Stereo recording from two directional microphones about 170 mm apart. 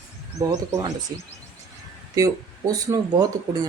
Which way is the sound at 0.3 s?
20° right (ahead or behind).